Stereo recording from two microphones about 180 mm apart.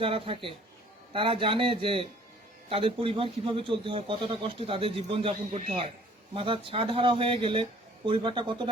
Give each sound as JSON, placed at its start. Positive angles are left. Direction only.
{"t": 0.0, "sound": "a man's voice", "side_deg": -30}